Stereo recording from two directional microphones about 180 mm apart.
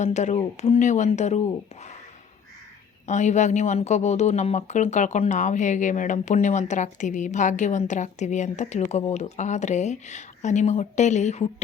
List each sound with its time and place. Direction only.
0.0 s speech: 40° left (ahead or behind)
3.1 s speech: 40° left (ahead or behind)